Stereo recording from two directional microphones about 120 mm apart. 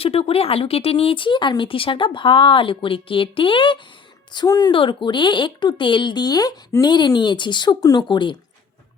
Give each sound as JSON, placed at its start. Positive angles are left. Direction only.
{"t": 0.0, "sound": "speech", "side_deg": 55}
{"t": 4.3, "sound": "speech", "side_deg": 35}
{"t": 4.7, "sound": "speech", "side_deg": 45}